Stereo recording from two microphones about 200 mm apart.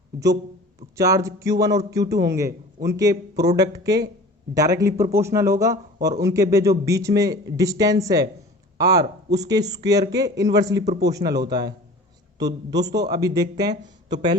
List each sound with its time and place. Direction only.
0.9 s a man's voice: 15° right (ahead or behind)
12.7 s a man's voice: 60° right (ahead or behind)
13.0 s speech: 20° right (ahead or behind)